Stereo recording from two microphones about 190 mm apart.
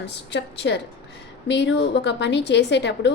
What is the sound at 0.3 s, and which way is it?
A woman's voice, 70° left (ahead or behind).